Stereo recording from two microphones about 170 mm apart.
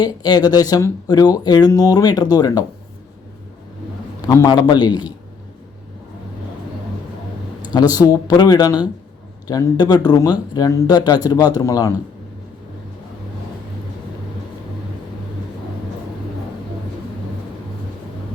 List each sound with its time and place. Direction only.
0.0 s speech: 25° left (ahead or behind)
4.3 s speech: 20° left (ahead or behind)
7.6 s speech: 25° left (ahead or behind)